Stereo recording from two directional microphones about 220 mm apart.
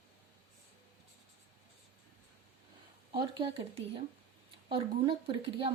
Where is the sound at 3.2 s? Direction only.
25° right (ahead or behind).